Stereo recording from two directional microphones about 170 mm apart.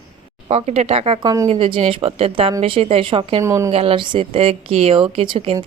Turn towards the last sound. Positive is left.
turn(degrees=-35)  # may be behind; listen again after turning